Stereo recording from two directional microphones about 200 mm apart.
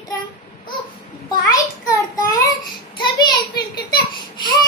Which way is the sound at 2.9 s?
20° left (ahead or behind).